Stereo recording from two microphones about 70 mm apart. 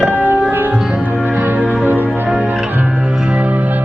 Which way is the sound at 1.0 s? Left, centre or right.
Right.